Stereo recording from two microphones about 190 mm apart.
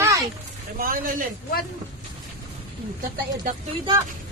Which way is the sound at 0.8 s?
50° right (ahead or behind).